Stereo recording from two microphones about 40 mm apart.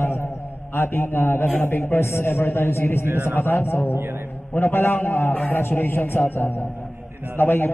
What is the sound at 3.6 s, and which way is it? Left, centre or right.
Speech, left.